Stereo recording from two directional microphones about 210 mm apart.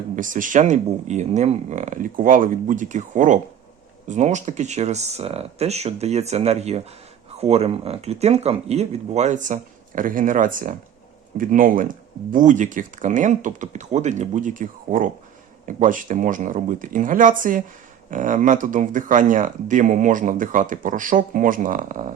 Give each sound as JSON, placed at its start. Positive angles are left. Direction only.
{"t": 0.2, "sound": "speech", "side_deg": -40}